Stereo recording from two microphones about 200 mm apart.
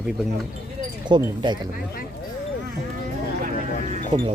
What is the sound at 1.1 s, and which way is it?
Speech, 25° right (ahead or behind).